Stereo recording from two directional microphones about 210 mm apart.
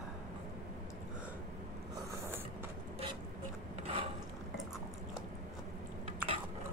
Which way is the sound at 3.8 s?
25° right (ahead or behind).